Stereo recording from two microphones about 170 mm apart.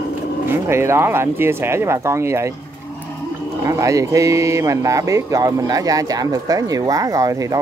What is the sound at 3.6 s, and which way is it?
Speech, 20° right (ahead or behind).